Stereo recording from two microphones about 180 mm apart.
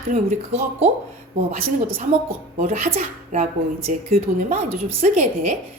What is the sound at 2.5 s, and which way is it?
Speech, 40° right (ahead or behind).